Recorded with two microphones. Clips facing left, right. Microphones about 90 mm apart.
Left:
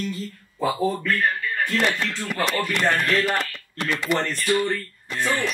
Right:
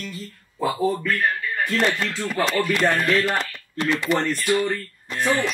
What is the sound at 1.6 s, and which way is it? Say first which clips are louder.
Speech: right 1 dB; centre (ahead or behind).